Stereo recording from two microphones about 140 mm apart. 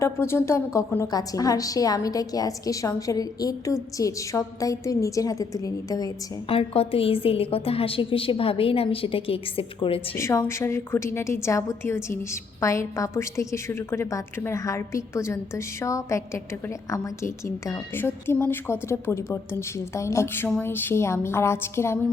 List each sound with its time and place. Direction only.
0.0 s a woman's voice: 20° left (ahead or behind)
6.5 s a woman's voice: 40° left (ahead or behind)
10.2 s a woman's voice: 20° left (ahead or behind)